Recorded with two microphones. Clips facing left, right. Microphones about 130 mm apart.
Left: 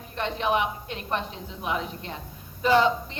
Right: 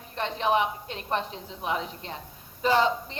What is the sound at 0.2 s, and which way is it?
A woman's voice, 30° right (ahead or behind).